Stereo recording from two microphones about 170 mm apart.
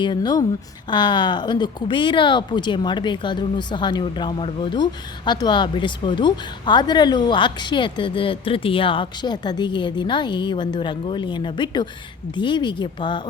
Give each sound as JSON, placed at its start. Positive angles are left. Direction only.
{"t": 0.0, "sound": "speech", "side_deg": 25}